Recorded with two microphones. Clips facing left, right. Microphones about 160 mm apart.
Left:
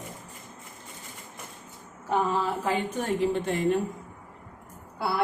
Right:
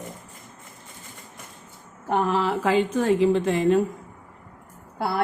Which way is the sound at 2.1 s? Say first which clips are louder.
Right 3 dB; 70° right (ahead or behind).